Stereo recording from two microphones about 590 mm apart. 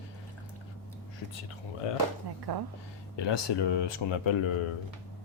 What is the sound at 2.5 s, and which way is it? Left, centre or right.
Speech, right.